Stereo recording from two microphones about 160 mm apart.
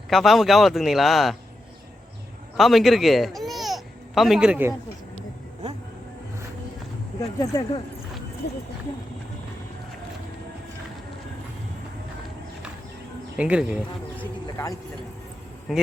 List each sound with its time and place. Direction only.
0.1 s speech: centre (ahead or behind)
2.6 s speech: centre (ahead or behind)
5.6 s vehicle: 45° right (ahead or behind)
7.2 s speech: 20° left (ahead or behind)
13.3 s speech: 5° right (ahead or behind)
14.4 s speech: 20° left (ahead or behind)
15.7 s speech: centre (ahead or behind)